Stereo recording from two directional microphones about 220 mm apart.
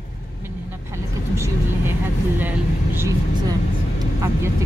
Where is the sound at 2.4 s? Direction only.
10° right (ahead or behind).